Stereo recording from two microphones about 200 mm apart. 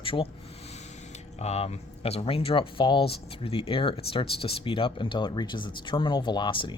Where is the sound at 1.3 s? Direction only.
30° left (ahead or behind).